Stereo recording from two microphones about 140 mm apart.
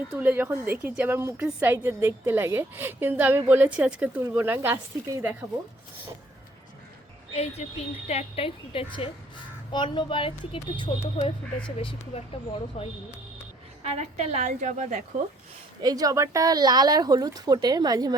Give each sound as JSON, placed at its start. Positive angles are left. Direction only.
{"t": 0.1, "sound": "a woman's voice", "side_deg": -15}
{"t": 7.3, "sound": "a woman's voice", "side_deg": 50}
{"t": 13.8, "sound": "a woman's voice", "side_deg": -50}
{"t": 15.8, "sound": "speech", "side_deg": -25}